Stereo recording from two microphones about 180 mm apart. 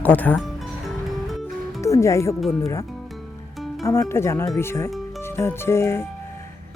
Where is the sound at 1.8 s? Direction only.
15° left (ahead or behind).